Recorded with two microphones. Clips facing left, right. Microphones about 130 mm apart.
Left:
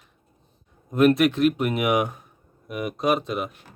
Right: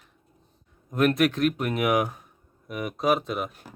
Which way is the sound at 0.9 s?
Centre (ahead or behind).